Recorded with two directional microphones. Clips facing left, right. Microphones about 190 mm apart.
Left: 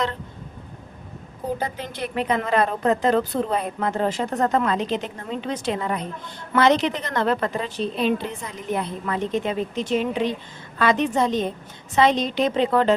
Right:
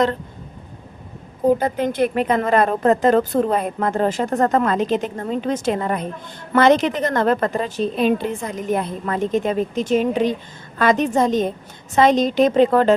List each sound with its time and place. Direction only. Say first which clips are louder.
1.5 s a woman's voice: right 11 dB; 50° right (ahead or behind)